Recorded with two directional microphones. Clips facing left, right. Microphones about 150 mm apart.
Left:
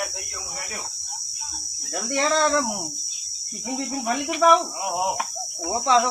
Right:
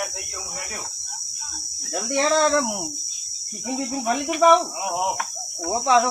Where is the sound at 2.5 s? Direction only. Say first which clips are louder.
Right 2 dB; 20° right (ahead or behind).